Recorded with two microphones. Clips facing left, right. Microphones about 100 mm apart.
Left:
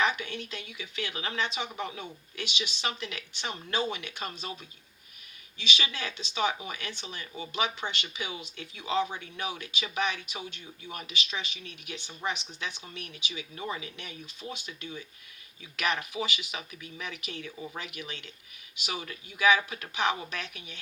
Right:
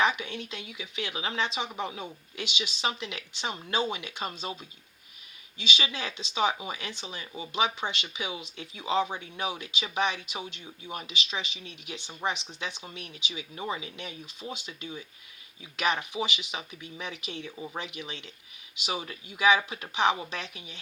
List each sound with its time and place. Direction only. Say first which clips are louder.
0.0 s speech: right 2 dB; 25° right (ahead or behind)
5.5 s speech: right 1 dB; 20° right (ahead or behind)